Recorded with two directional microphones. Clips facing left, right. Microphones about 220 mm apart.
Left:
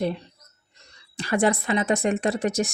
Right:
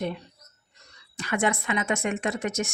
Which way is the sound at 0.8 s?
30° left (ahead or behind).